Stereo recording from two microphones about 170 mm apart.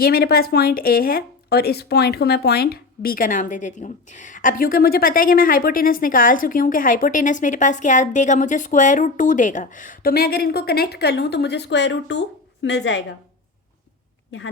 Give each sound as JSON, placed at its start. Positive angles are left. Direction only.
{"t": 0.0, "sound": "a woman's voice", "side_deg": 65}